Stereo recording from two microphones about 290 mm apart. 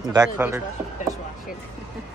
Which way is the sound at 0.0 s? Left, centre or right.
Centre.